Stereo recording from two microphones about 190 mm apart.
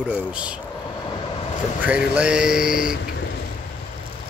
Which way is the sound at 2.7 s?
50° left (ahead or behind).